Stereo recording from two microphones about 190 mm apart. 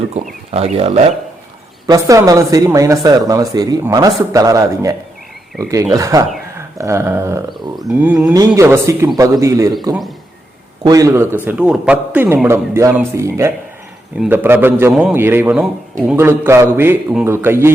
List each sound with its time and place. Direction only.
0.2 s speech: 35° right (ahead or behind)
1.9 s speech: 15° right (ahead or behind)
6.0 s speech: 15° right (ahead or behind)
7.8 s speech: 5° right (ahead or behind)